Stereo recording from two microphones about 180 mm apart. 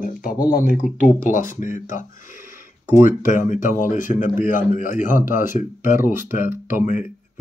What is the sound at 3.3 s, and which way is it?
Speech, 45° left (ahead or behind).